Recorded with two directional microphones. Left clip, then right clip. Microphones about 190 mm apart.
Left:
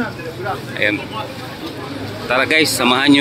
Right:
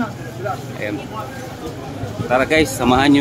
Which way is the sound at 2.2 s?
10° right (ahead or behind).